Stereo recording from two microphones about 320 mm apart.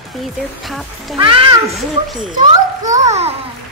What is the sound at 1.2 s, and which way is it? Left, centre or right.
Speech, centre.